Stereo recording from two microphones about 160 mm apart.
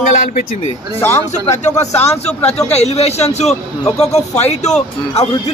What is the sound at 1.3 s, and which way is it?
A man's voice, 45° left (ahead or behind).